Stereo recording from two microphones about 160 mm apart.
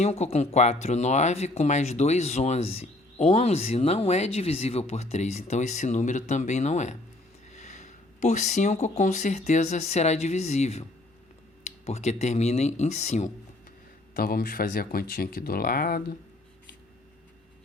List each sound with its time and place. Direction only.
0.0 s speech: 40° left (ahead or behind)
14.2 s speech: 65° left (ahead or behind)